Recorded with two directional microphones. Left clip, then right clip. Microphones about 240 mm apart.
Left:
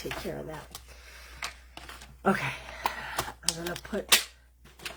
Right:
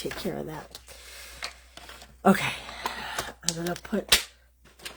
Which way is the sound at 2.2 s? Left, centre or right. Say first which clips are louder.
Right 5 dB; right.